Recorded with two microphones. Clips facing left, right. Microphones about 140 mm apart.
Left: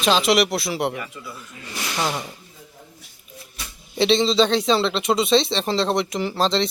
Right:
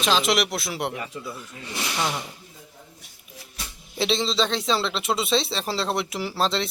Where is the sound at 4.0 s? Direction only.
Centre (ahead or behind).